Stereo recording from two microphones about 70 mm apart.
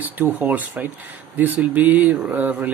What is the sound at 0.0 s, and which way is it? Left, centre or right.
Speech, right.